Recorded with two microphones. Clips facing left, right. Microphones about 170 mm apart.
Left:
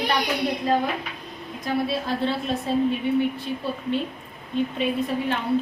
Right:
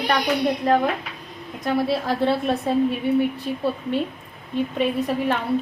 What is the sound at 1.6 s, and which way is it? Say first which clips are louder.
Speech: right 3 dB; 60° right (ahead or behind).